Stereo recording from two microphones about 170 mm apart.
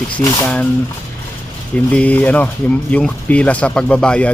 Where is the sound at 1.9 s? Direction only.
10° left (ahead or behind).